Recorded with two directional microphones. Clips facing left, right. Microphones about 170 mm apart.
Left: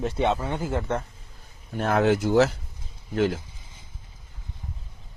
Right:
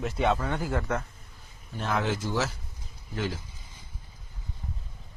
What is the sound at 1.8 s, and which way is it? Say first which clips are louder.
Speech: left 8 dB; 60° left (ahead or behind).